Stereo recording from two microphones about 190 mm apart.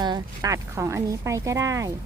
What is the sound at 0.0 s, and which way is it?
Speech, 20° right (ahead or behind).